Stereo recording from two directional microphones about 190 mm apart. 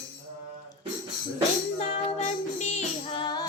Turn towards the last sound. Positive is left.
turn(degrees=35)  # may be behind; listen again after turning